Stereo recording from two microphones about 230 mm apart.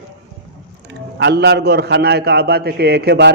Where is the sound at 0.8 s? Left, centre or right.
Right.